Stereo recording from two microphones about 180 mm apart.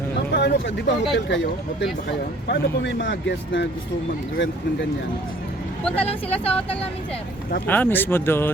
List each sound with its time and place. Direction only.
0.3 s speech: 80° left
6.0 s speech: 35° left (ahead or behind)
7.7 s speech: 10° left (ahead or behind)